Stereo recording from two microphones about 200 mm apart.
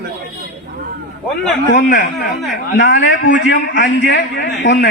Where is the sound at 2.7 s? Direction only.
65° left (ahead or behind).